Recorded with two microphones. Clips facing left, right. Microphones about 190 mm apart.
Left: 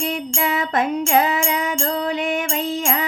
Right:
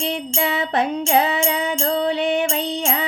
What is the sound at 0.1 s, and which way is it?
Music, 35° right (ahead or behind).